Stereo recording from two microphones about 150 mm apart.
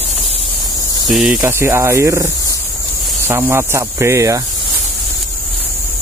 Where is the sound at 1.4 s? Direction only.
15° right (ahead or behind).